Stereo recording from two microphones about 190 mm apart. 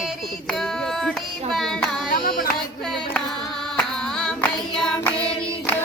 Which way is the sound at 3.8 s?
5° left (ahead or behind).